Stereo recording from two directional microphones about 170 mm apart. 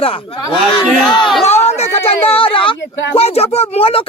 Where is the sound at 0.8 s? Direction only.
Centre (ahead or behind).